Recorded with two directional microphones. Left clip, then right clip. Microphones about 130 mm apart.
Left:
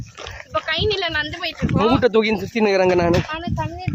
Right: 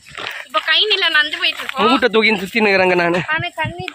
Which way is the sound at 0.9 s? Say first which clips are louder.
Right 8 dB; 10° left (ahead or behind).